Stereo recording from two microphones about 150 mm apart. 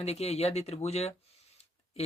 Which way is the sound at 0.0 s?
45° left (ahead or behind).